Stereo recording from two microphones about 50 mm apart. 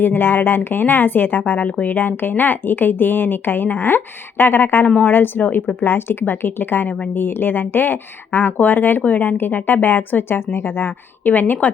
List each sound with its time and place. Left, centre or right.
0.0 s speech: left
9.0 s a woman's voice: left
9.2 s speech: left
11.3 s a woman's voice: left